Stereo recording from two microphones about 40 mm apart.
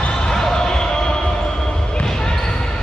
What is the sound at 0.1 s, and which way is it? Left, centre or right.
Basketball bounce, centre.